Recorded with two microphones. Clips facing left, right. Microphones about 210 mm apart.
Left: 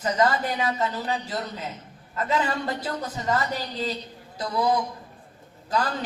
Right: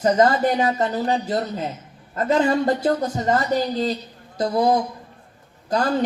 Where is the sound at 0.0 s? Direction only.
45° right (ahead or behind).